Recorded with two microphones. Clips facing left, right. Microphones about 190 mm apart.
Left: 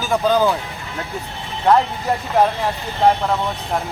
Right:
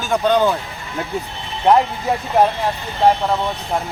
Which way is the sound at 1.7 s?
15° right (ahead or behind).